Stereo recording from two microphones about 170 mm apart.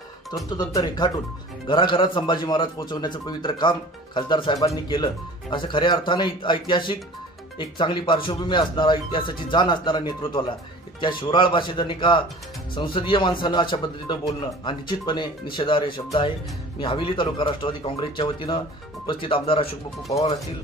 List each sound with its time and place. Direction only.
0.7 s a man's voice: 25° left (ahead or behind)